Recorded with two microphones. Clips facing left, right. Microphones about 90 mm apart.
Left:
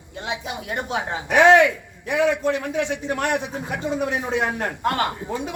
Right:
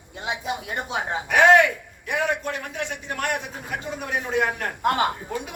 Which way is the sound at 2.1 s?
50° right (ahead or behind).